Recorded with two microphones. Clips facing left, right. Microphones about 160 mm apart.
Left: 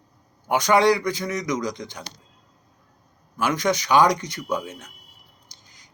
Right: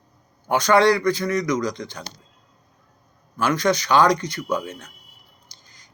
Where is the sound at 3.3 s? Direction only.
15° left (ahead or behind).